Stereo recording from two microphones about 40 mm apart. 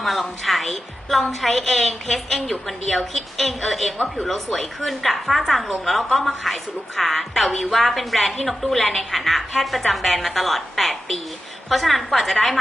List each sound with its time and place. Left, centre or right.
0.0 s a woman's voice: centre